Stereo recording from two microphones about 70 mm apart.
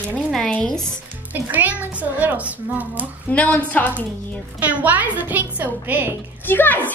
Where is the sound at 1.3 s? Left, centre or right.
Right.